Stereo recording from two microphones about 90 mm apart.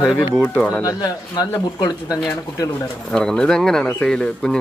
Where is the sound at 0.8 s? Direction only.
45° left (ahead or behind).